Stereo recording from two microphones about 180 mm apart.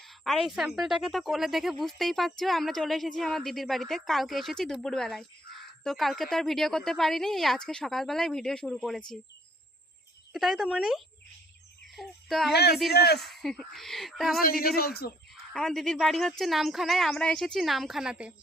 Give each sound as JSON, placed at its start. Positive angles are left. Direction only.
{"t": 0.0, "sound": "speech", "side_deg": 0}
{"t": 10.3, "sound": "a child's voice", "side_deg": 0}
{"t": 12.9, "sound": "speech", "side_deg": 65}
{"t": 13.1, "sound": "speech", "side_deg": 0}
{"t": 14.8, "sound": "speech", "side_deg": 60}
{"t": 15.5, "sound": "speech", "side_deg": 5}